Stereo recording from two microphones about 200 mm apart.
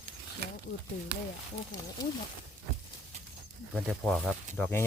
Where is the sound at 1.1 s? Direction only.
55° right (ahead or behind).